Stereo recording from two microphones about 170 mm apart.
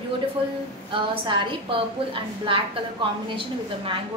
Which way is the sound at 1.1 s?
30° right (ahead or behind).